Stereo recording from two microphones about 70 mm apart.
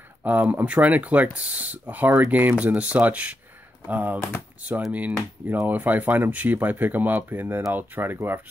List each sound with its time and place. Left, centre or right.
0.2 s speech: right